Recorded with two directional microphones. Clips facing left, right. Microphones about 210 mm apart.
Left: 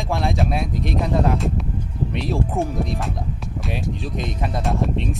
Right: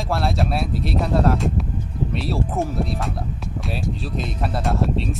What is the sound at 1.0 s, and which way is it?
Music, centre (ahead or behind).